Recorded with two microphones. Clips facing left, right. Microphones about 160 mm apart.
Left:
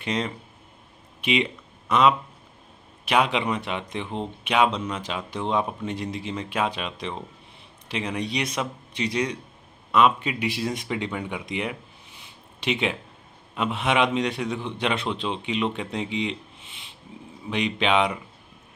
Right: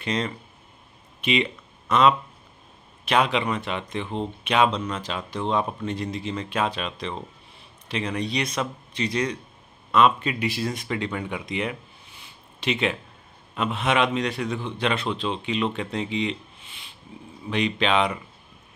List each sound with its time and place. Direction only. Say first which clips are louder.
0.0 s speech: even; 10° left (ahead or behind)
1.2 s a sound: even; 15° left (ahead or behind)
3.1 s speech: even; 15° left (ahead or behind)